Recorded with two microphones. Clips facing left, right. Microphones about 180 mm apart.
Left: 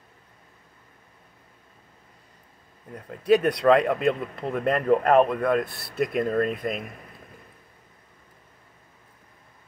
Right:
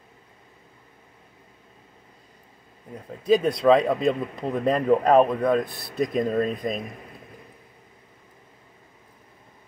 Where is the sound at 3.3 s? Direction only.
75° left (ahead or behind).